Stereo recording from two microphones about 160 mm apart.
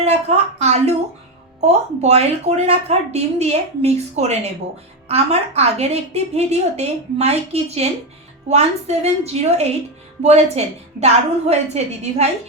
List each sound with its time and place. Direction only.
0.0 s a woman's voice: 40° right (ahead or behind)